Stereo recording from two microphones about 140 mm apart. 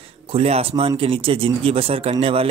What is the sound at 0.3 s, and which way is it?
A man's voice, 45° right (ahead or behind).